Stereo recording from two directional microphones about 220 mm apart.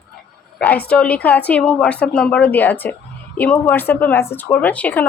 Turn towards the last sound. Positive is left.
turn(degrees=5)  # may be behind; listen again after turning